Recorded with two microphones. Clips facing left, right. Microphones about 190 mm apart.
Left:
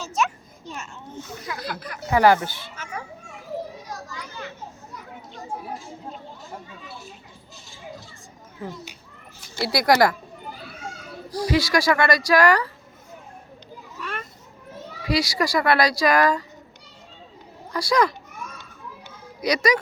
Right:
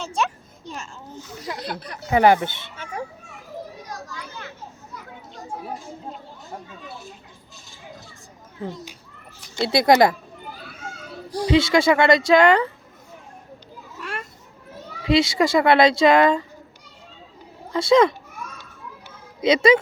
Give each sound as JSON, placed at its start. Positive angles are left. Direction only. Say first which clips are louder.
{"t": 1.5, "sound": "speech", "louder": "right 1 dB", "side_deg": -25}
{"t": 9.6, "sound": "speech", "louder": "right 3 dB", "side_deg": -20}
{"t": 11.4, "sound": "speech", "louder": "right 4 dB", "side_deg": -25}
{"t": 15.0, "sound": "speech", "louder": "right 5 dB", "side_deg": -25}
{"t": 17.7, "sound": "speech", "louder": "right 5 dB", "side_deg": -25}
{"t": 19.4, "sound": "speech", "louder": "right 5 dB", "side_deg": -25}